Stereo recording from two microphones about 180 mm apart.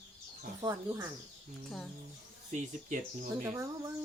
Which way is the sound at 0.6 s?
15° right (ahead or behind).